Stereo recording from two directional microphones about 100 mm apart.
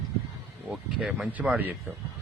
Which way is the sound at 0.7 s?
5° right (ahead or behind).